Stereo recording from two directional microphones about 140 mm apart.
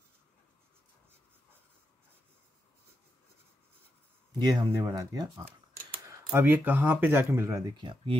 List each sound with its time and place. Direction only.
4.3 s speech: 30° right (ahead or behind)
6.0 s speech: 15° right (ahead or behind)
7.8 s speech: 35° right (ahead or behind)